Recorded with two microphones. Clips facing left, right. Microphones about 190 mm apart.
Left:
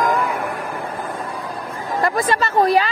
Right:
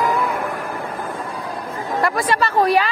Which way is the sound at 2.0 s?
20° left (ahead or behind).